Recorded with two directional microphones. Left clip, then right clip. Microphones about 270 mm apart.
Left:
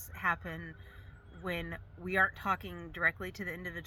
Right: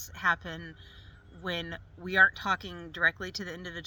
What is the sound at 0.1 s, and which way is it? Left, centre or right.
Speech, centre.